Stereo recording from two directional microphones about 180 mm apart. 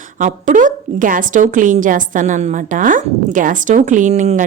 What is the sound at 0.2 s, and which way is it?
A woman's voice, 45° right (ahead or behind).